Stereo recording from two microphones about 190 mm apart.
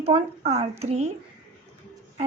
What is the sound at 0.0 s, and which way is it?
A woman's voice, 35° right (ahead or behind).